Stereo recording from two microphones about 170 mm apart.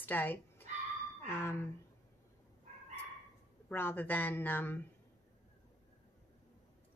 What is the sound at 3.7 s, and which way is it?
A woman's voice, 10° left (ahead or behind).